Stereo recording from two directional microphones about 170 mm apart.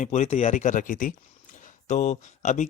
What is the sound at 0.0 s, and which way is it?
Speech, 45° left (ahead or behind).